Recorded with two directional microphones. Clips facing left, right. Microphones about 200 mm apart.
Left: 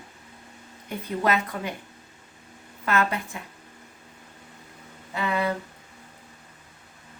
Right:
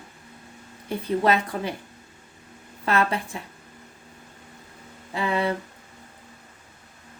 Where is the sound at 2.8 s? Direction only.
30° right (ahead or behind).